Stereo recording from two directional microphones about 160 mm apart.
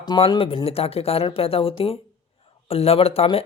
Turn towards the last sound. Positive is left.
turn(degrees=35)  # may be behind; listen again after turning